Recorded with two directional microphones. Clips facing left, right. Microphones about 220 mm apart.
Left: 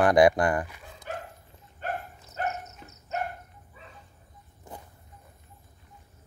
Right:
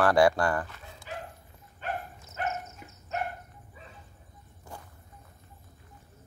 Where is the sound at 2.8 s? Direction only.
15° right (ahead or behind).